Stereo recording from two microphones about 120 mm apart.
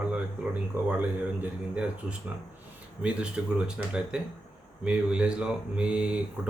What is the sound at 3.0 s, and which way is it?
Speech, 5° right (ahead or behind).